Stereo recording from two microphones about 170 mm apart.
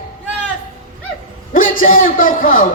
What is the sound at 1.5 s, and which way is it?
A man's voice, 55° left (ahead or behind).